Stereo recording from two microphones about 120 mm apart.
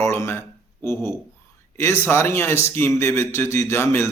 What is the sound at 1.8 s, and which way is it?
Speech, 20° left (ahead or behind).